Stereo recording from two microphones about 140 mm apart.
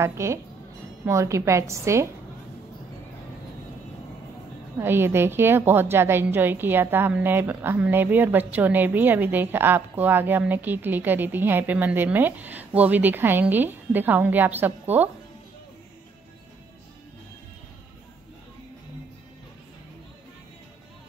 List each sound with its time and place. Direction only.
0.0 s a woman's voice: 20° right (ahead or behind)
4.7 s a woman's voice: 15° right (ahead or behind)